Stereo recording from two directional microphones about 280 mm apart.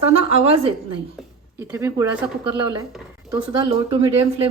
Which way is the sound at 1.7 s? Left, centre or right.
Centre.